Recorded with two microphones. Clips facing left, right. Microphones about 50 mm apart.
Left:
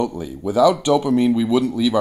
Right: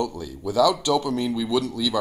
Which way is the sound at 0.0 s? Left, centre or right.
Left.